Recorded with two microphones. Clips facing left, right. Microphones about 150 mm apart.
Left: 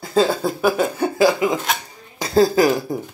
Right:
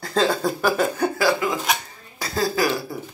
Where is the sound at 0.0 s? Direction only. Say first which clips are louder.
Left 3 dB; 5° left (ahead or behind).